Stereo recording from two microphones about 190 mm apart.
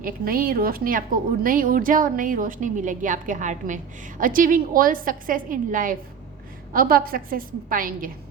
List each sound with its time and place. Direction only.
0.0 s a woman's voice: 50° right (ahead or behind)